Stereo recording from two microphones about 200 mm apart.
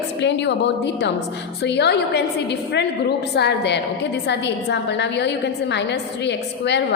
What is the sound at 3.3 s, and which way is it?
A woman's voice, 55° left (ahead or behind).